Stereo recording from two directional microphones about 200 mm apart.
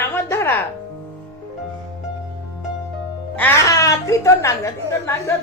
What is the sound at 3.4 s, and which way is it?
A woman's voice, 15° left (ahead or behind).